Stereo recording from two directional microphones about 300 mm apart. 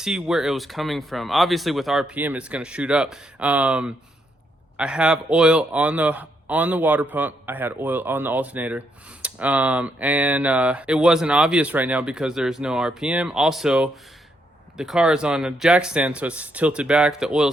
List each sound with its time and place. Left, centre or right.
0.0 s speech: centre